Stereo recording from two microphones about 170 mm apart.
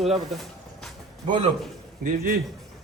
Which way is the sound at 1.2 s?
30° right (ahead or behind).